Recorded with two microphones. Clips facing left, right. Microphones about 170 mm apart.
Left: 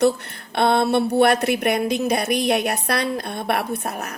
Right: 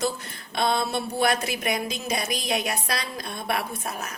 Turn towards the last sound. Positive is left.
turn(degrees=60)  # may be behind; listen again after turning